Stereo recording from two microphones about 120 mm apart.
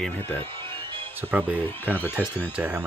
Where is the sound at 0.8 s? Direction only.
45° right (ahead or behind).